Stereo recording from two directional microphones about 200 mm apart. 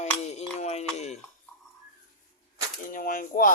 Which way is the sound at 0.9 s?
35° left (ahead or behind).